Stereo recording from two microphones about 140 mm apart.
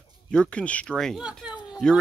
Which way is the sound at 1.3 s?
Centre (ahead or behind).